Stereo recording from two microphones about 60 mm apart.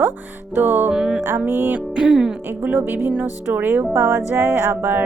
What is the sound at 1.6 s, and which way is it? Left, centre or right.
Music, right.